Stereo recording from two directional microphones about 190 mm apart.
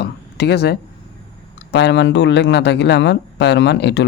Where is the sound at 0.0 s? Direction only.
60° left (ahead or behind).